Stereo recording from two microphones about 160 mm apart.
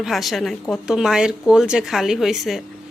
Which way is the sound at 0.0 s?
Centre (ahead or behind).